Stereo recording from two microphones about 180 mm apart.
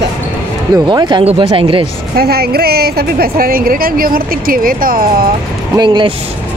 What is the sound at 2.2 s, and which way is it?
A woman's voice, 60° right (ahead or behind).